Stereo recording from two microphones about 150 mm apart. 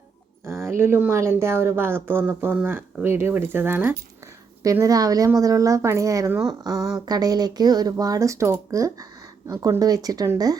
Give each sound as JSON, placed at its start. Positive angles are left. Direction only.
{"t": 0.7, "sound": "speech", "side_deg": -15}